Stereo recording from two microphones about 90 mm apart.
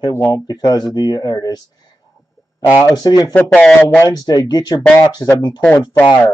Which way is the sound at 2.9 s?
45° left (ahead or behind).